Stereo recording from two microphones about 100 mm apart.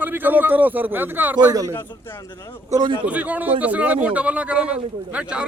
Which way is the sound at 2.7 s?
45° right (ahead or behind).